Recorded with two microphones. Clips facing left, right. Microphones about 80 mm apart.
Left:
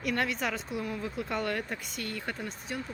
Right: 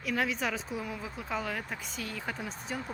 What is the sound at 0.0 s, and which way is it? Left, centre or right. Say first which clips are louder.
Speech: left 1 dB; centre.